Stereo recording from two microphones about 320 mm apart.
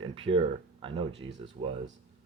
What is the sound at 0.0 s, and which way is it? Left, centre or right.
Speech, centre.